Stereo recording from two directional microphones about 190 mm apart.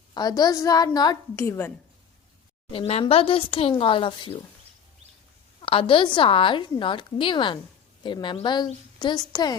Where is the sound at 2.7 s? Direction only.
30° left (ahead or behind).